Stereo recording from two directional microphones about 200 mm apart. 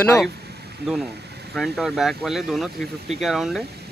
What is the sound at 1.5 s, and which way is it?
Speech, centre (ahead or behind).